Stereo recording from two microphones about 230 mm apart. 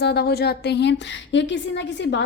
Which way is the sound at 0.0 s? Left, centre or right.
Left.